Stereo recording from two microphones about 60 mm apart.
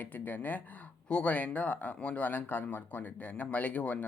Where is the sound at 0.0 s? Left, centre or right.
Left.